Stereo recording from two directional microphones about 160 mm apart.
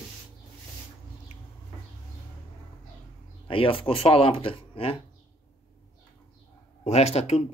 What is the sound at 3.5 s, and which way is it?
Speech, 35° left (ahead or behind).